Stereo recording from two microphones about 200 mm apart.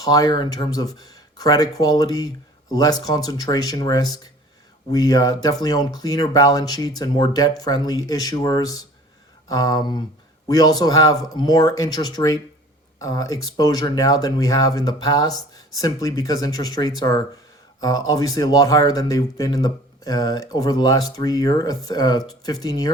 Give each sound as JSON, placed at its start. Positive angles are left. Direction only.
{"t": 0.0, "sound": "speech", "side_deg": 20}